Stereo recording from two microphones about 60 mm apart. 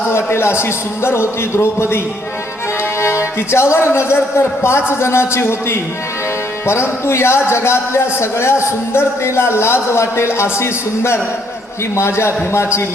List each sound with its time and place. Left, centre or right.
0.1 s a man's voice: left
3.0 s a man's voice: left